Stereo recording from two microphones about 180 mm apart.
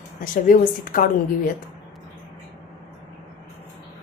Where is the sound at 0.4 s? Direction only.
50° left (ahead or behind).